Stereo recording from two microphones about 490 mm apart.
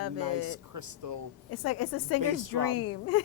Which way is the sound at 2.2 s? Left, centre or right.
Right.